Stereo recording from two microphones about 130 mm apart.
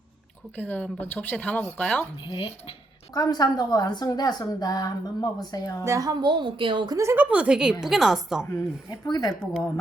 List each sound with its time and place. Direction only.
0.5 s speech: 10° left (ahead or behind)
2.2 s speech: 45° left (ahead or behind)
3.1 s a woman's voice: 30° left (ahead or behind)
5.8 s speech: 25° right (ahead or behind)
6.9 s a woman's voice: 20° right (ahead or behind)
7.3 s a woman's voice: 10° right (ahead or behind)
8.5 s speech: 30° left (ahead or behind)